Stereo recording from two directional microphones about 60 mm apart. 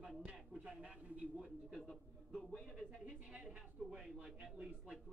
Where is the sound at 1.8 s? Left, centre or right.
Centre.